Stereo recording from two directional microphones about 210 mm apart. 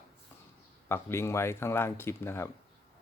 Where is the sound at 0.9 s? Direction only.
10° left (ahead or behind).